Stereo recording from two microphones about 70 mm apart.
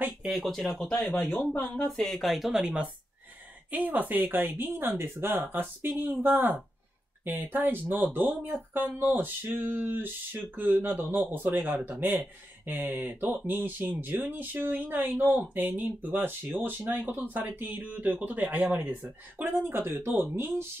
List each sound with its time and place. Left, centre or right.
0.2 s speech: centre
1.1 s speech: left
1.9 s speech: centre
2.6 s speech: centre; by 20.6 s right